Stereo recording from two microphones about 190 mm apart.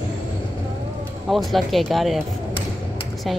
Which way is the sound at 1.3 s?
Centre (ahead or behind).